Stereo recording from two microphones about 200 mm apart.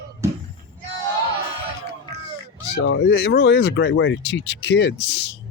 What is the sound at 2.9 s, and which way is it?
Speech, 60° left (ahead or behind).